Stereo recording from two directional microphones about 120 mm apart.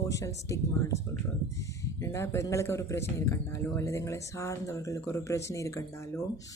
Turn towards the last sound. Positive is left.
turn(degrees=25)  # may be behind; listen again after turning